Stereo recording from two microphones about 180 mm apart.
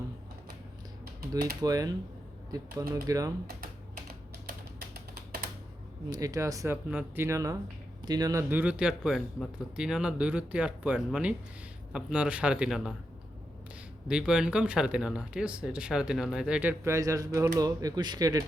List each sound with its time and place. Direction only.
1.6 s speech: 20° right (ahead or behind)
4.9 s typing: 60° right (ahead or behind)
6.1 s speech: 20° right (ahead or behind); by 12.9 s 5° right (ahead or behind)
14.1 s speech: 5° right (ahead or behind); by 18.4 s 20° right (ahead or behind)